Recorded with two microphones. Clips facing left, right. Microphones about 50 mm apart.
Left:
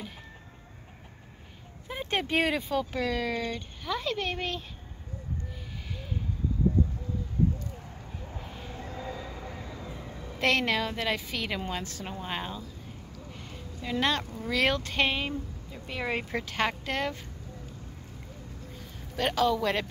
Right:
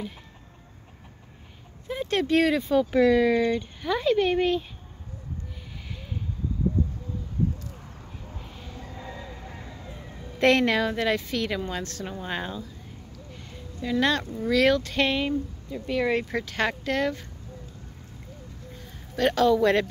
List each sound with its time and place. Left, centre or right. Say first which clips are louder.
1.9 s speech: right 6 dB; centre
2.7 s speech: right 9 dB; centre
8.3 s a sound: left 2 dB; centre
8.6 s train: left 1 dB; left
8.9 s train: left 2 dB; centre
10.4 s a woman's voice: right 6 dB; centre
12.2 s a woman's voice: right 3 dB; centre
13.3 s a sound: right 1 dB; centre
14.5 s speech: right 6 dB; centre
19.1 s a woman's voice: right 5 dB; centre